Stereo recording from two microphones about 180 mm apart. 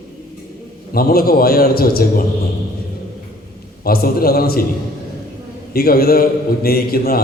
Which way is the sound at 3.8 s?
55° left (ahead or behind).